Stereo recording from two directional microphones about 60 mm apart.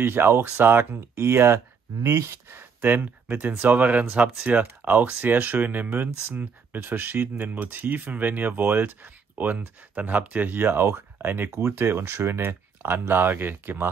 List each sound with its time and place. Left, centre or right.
0.0 s speech: right
2.8 s speech: right